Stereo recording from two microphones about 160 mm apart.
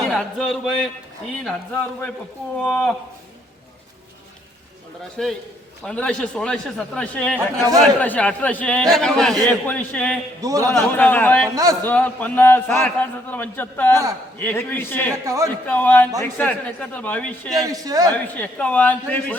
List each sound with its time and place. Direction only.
0.1 s a man's voice: 5° left (ahead or behind)
5.1 s a man's voice: 5° left (ahead or behind)
10.4 s a man's voice: 20° right (ahead or behind)
10.7 s a man's voice: 10° left (ahead or behind)
11.5 s a man's voice: 20° right (ahead or behind)
11.8 s a man's voice: 10° left (ahead or behind)
13.9 s a man's voice: 20° right (ahead or behind)
14.3 s a man's voice: 15° left (ahead or behind)
15.2 s a man's voice: 20° right (ahead or behind)
15.6 s a man's voice: 10° left (ahead or behind)
17.6 s a man's voice: 20° right (ahead or behind)
18.1 s a man's voice: 10° left (ahead or behind)